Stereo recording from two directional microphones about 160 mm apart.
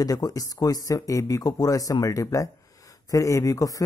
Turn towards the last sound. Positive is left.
turn(degrees=20)  # may be behind; listen again after turning